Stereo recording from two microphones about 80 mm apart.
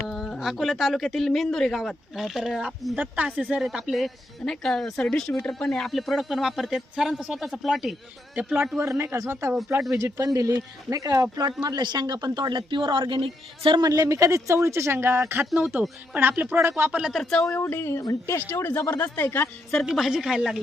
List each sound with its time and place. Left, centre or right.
0.1 s speech: centre
3.0 s speech: centre
3.6 s speech: centre
8.8 s speech: right
11.6 s speech: right
13.8 s speech: right
17.1 s speech: centre
17.5 s speech: left
18.9 s speech: left
19.8 s speech: centre